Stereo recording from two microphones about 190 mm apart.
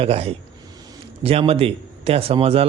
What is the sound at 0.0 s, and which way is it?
A man's voice, 30° right (ahead or behind).